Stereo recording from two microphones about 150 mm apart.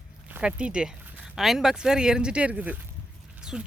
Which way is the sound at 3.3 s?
5° right (ahead or behind).